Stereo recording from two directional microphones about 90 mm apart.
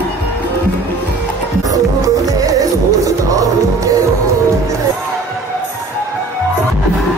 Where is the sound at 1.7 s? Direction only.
40° right (ahead or behind).